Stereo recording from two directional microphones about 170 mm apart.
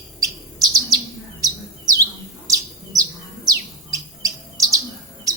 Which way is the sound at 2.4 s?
20° right (ahead or behind).